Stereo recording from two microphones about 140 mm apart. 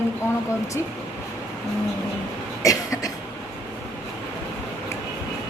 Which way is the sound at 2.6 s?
25° left (ahead or behind).